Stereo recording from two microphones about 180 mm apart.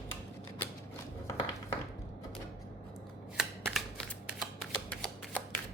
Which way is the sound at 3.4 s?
Centre (ahead or behind).